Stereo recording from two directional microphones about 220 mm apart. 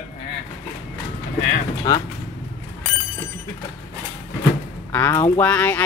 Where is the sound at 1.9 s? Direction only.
15° left (ahead or behind).